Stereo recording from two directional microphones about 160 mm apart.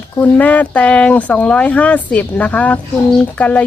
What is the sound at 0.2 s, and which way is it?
Speech, 10° left (ahead or behind).